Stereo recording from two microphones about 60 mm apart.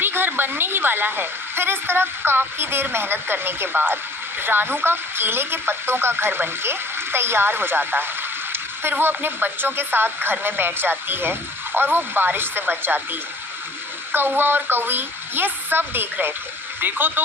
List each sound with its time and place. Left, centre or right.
0.0 s speech: right
14.1 s speech: right